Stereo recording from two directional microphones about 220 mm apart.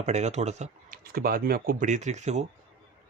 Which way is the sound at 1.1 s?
40° right (ahead or behind).